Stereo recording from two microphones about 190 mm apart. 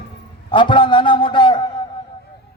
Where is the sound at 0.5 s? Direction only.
25° left (ahead or behind).